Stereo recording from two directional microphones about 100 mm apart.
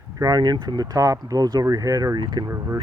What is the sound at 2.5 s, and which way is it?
Speech, 35° right (ahead or behind).